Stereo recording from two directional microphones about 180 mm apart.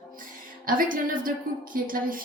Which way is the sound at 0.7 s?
50° right (ahead or behind).